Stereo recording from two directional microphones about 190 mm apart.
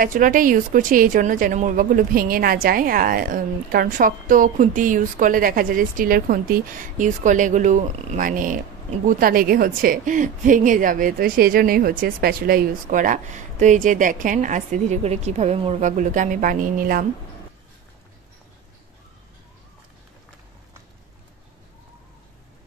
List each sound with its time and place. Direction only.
0.0 s speech: 45° right (ahead or behind)